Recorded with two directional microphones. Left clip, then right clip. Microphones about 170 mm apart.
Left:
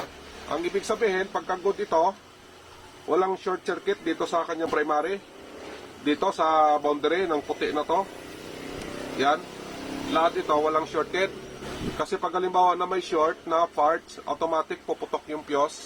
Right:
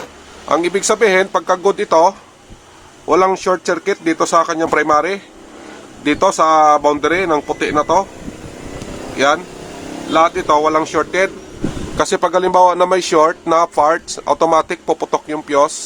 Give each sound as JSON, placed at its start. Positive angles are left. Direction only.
{"t": 0.4, "sound": "speech", "side_deg": -50}
{"t": 3.1, "sound": "speech", "side_deg": -55}
{"t": 9.1, "sound": "speech", "side_deg": -45}
{"t": 11.9, "sound": "speech", "side_deg": -55}